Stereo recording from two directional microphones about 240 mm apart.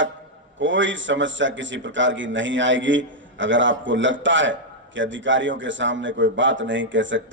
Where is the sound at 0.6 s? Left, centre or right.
Right.